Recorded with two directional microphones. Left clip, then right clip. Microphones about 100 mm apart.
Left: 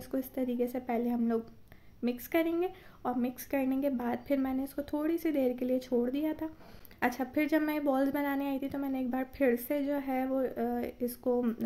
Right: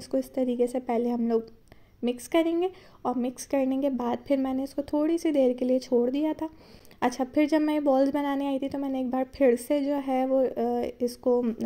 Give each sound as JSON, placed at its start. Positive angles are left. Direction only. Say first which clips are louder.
{"t": 0.1, "sound": "a woman's voice", "louder": "right 7 dB", "side_deg": -35}